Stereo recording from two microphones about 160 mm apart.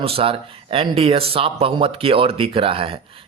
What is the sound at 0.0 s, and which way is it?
A man's voice, 35° right (ahead or behind).